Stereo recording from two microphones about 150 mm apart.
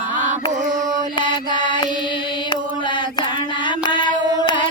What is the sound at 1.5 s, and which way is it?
Mantra, 30° left (ahead or behind).